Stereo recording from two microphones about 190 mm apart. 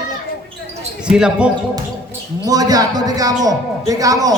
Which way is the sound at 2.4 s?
20° right (ahead or behind).